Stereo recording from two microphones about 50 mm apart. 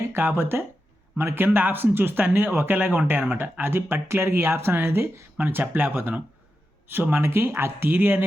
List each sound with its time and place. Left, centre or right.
0.1 s speech: right